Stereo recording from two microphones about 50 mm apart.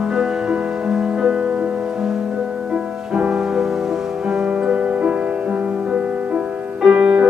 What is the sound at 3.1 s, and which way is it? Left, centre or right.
Music, centre.